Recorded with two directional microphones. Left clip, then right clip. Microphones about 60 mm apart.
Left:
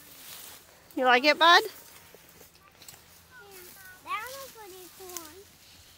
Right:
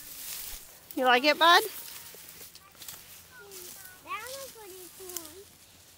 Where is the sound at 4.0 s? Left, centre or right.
Left.